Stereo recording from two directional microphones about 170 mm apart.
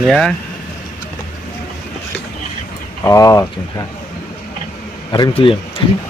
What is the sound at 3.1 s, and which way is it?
Speech, 20° left (ahead or behind).